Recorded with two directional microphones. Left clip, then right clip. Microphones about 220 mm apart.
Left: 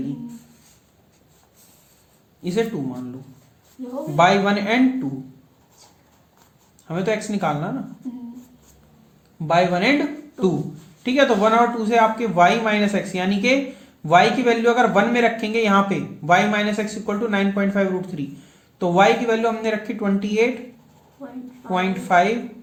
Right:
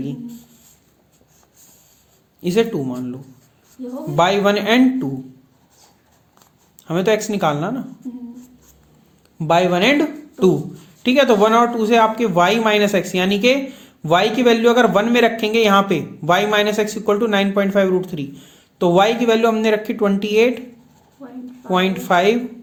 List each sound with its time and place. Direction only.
2.4 s a man's voice: 40° right (ahead or behind)
4.1 s a man's voice: 40° right (ahead or behind)
6.8 s a man's voice: 40° right (ahead or behind)
9.5 s a man's voice: 40° right (ahead or behind)
21.7 s speech: 40° right (ahead or behind)